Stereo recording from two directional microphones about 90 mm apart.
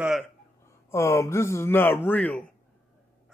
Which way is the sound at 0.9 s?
30° left (ahead or behind).